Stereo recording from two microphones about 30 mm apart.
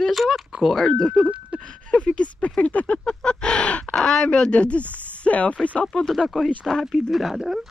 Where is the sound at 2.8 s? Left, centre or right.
Left.